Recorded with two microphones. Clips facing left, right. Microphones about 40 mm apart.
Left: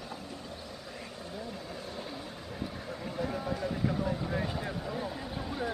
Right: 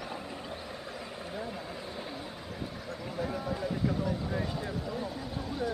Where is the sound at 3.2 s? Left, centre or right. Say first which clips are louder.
Even; centre.